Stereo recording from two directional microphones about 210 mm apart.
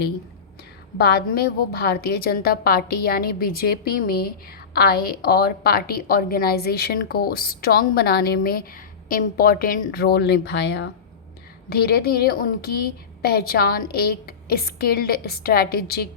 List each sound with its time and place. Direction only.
0.9 s a woman's voice: 50° left (ahead or behind)